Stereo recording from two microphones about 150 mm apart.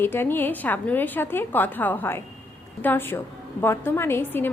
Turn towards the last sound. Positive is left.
turn(degrees=15)  # may be behind; listen again after turning